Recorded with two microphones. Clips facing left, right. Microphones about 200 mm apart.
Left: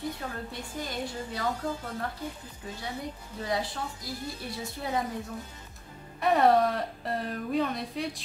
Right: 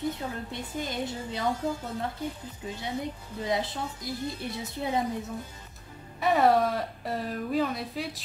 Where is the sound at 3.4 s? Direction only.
20° right (ahead or behind).